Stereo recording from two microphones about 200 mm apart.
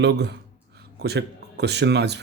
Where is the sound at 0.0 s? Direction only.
60° right (ahead or behind).